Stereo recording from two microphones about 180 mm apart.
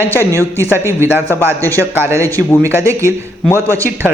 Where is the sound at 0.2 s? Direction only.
15° right (ahead or behind).